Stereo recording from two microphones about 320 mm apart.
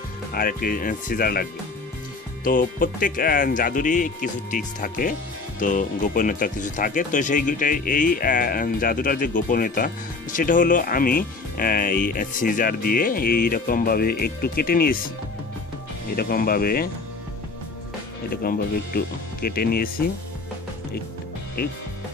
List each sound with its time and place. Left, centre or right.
0.3 s speech: left
16.2 s speech: left
18.3 s speech: left